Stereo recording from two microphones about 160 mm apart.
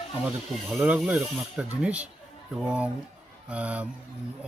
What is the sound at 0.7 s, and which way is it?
A man's voice, 5° right (ahead or behind).